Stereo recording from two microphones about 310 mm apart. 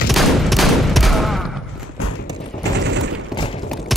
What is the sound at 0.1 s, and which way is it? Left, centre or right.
Fusillade, centre.